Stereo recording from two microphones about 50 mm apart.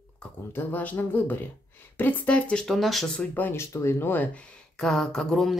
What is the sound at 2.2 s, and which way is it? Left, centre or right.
Speech, left.